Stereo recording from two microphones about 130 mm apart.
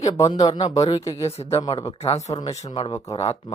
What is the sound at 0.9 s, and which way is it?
Speech, 25° left (ahead or behind).